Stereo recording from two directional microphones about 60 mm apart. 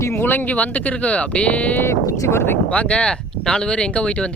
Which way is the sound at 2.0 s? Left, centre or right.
Left.